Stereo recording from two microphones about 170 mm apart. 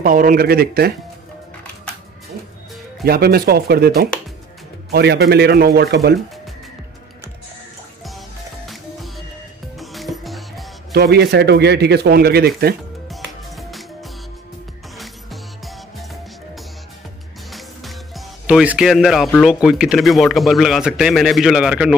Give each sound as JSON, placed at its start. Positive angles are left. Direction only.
{"t": 0.0, "sound": "speech", "side_deg": -55}
{"t": 3.1, "sound": "speech", "side_deg": -65}
{"t": 9.8, "sound": "music", "side_deg": 0}
{"t": 10.9, "sound": "speech", "side_deg": -70}
{"t": 13.1, "sound": "music", "side_deg": 0}
{"t": 17.5, "sound": "speech", "side_deg": 0}